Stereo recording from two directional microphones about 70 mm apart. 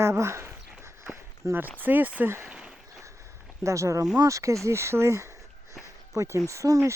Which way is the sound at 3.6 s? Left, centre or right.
Right.